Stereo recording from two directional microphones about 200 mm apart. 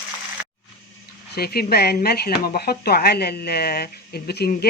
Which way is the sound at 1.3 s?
50° left (ahead or behind).